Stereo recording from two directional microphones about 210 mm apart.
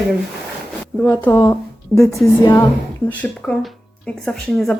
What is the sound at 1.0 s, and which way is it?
Speech, 10° left (ahead or behind).